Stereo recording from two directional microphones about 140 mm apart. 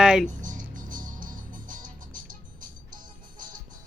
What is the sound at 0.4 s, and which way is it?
Music, 70° right (ahead or behind).